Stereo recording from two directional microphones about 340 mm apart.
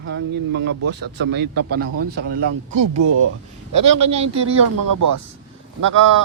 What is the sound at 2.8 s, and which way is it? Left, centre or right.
Speech, right.